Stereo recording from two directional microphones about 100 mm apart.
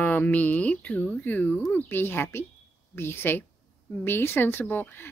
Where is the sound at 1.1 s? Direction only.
20° left (ahead or behind).